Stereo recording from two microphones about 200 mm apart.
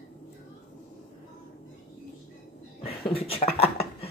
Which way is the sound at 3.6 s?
30° left (ahead or behind).